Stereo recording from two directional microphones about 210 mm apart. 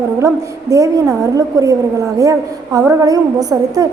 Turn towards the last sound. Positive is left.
turn(degrees=-15)  # may be behind; listen again after turning